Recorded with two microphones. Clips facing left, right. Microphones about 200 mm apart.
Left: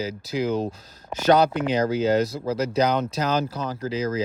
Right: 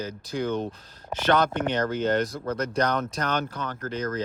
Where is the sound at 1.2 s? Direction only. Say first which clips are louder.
Left 5 dB; 40° left (ahead or behind).